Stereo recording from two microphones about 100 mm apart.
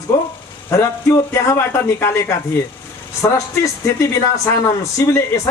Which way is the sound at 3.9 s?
30° left (ahead or behind).